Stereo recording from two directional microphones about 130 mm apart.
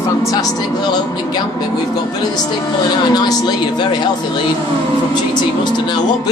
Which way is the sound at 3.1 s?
30° left (ahead or behind).